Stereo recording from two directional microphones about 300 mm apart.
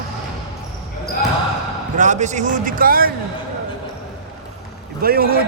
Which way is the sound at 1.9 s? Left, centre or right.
Right.